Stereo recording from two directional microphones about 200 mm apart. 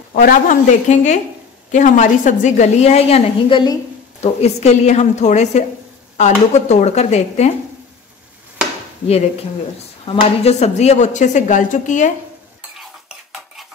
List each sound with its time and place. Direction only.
0.1 s speech: 45° left (ahead or behind)
10.0 s speech: 30° left (ahead or behind)